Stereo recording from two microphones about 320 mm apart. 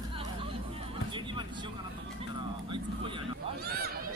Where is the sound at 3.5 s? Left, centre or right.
Right.